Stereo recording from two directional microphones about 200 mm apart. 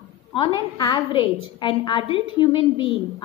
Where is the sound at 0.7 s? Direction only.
20° left (ahead or behind).